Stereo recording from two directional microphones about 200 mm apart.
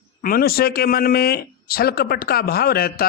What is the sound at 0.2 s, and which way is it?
Speech, 45° left (ahead or behind).